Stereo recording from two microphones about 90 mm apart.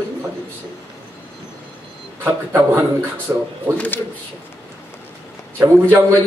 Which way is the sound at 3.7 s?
15° left (ahead or behind).